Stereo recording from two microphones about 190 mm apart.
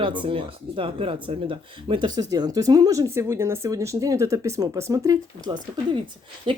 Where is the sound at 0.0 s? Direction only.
25° right (ahead or behind).